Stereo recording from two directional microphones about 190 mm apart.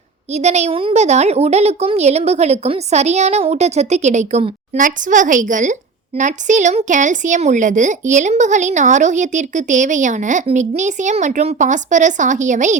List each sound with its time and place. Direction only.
0.3 s a woman's voice: 35° right (ahead or behind)